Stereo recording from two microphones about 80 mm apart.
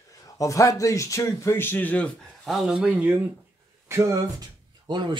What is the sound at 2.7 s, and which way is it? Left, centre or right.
Speech, centre.